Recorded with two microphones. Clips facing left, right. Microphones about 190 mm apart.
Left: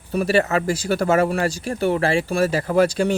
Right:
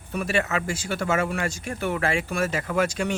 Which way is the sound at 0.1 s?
35° left (ahead or behind).